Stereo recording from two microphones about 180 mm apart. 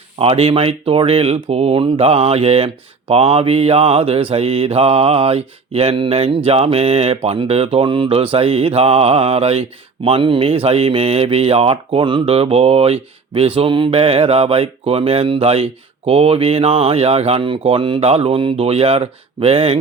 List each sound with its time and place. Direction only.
0.2 s mantra: 30° right (ahead or behind)